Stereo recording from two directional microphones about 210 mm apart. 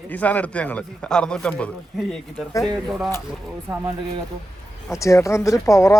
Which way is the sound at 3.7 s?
15° right (ahead or behind).